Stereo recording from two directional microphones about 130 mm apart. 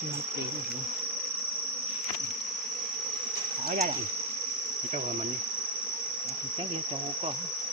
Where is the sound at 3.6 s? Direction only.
90° right.